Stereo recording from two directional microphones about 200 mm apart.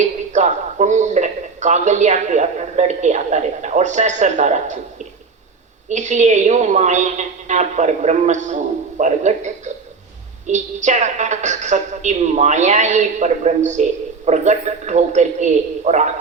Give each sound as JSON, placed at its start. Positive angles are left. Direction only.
{"t": 0.0, "sound": "a man's voice", "side_deg": -35}
{"t": 5.9, "sound": "a woman's voice", "side_deg": -35}